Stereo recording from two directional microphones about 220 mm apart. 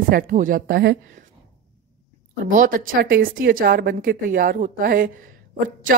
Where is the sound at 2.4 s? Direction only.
40° right (ahead or behind).